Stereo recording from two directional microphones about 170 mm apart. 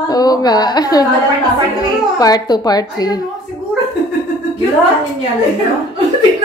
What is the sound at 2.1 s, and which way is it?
A woman's voice, 20° left (ahead or behind).